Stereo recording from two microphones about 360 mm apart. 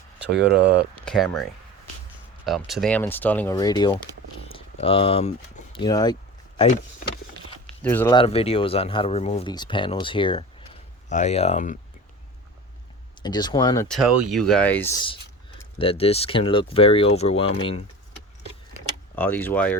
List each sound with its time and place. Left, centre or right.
0.3 s speech: right
1.0 s speech: centre
2.5 s speech: centre
7.8 s speech: centre
13.2 s speech: centre
19.1 s speech: centre